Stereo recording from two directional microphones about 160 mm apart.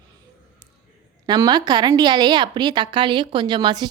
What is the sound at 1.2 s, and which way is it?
A woman's voice, 25° right (ahead or behind).